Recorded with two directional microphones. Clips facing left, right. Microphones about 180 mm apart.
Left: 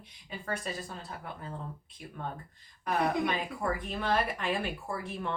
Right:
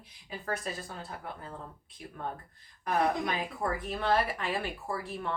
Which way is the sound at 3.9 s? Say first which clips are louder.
Right 4 dB; centre (ahead or behind).